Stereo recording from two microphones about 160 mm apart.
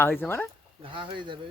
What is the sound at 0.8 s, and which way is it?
Speech, 30° right (ahead or behind).